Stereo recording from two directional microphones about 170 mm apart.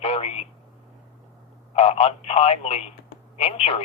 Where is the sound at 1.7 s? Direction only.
40° left (ahead or behind).